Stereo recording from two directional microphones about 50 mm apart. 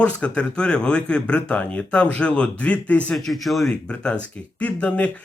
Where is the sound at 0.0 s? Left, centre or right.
Left.